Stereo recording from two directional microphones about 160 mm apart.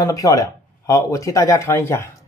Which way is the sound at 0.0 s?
20° left (ahead or behind).